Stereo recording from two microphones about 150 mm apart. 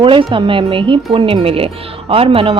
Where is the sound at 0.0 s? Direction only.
35° right (ahead or behind).